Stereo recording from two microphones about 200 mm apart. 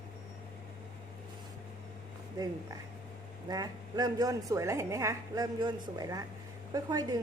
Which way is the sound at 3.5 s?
20° right (ahead or behind).